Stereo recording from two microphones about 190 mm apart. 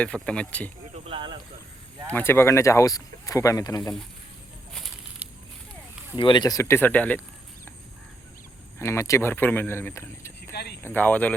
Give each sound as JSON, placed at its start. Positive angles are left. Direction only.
{"t": 0.0, "sound": "speech", "side_deg": 5}
{"t": 0.9, "sound": "a sound", "side_deg": -30}
{"t": 2.1, "sound": "speech", "side_deg": 10}
{"t": 6.1, "sound": "speech", "side_deg": 25}
{"t": 8.8, "sound": "speech", "side_deg": 15}
{"t": 10.5, "sound": "speech", "side_deg": 60}
{"t": 10.8, "sound": "speech", "side_deg": 10}